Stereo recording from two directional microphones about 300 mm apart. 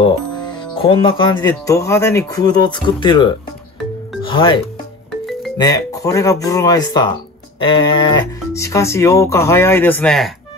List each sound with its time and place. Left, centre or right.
0.5 s speech: centre
5.6 s speech: centre